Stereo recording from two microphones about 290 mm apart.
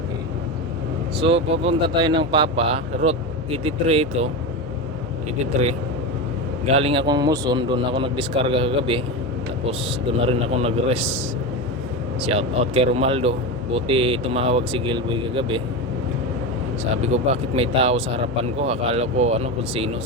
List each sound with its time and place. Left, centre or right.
1.2 s speech: centre
6.7 s a man's voice: right
10.2 s speech: centre
12.2 s speech: right
17.5 s speech: centre